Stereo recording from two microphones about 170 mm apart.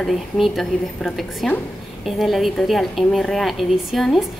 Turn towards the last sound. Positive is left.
turn(degrees=0)  # may be behind; listen again after turning